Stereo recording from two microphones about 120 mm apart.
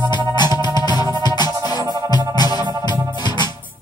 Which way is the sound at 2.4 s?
35° left (ahead or behind).